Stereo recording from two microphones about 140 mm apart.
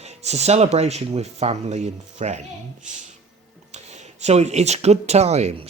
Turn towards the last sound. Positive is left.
turn(degrees=-50)  # may be behind; listen again after turning